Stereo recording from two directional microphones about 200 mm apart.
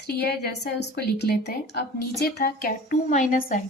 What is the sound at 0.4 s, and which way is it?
A woman's voice, 55° left (ahead or behind).